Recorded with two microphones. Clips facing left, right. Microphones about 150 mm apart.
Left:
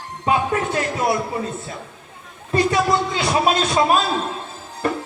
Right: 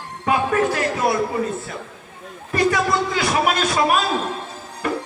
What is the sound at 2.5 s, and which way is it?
Speech, 25° left (ahead or behind).